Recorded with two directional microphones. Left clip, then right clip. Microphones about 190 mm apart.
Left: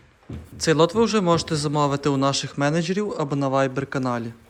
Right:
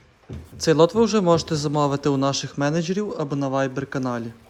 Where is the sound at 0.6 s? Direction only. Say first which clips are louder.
Right 1 dB; 20° right (ahead or behind).